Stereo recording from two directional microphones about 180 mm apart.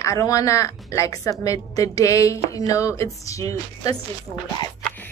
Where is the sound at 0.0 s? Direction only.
20° left (ahead or behind).